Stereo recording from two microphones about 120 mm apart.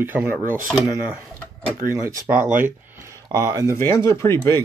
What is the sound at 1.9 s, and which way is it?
Speech, 25° right (ahead or behind).